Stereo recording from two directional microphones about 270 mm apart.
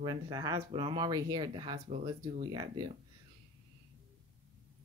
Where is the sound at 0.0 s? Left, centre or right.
Centre.